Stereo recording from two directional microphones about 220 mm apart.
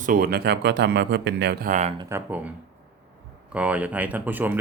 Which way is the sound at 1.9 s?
10° right (ahead or behind).